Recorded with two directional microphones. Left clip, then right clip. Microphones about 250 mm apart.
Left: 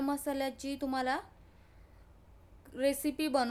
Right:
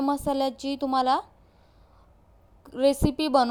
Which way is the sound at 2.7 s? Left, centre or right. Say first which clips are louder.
Right 9 dB; centre.